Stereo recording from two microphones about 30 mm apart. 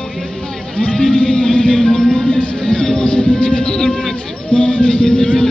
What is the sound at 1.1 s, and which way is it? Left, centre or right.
Music, left.